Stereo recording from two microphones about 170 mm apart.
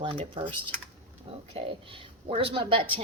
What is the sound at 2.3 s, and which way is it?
Speech, 35° right (ahead or behind).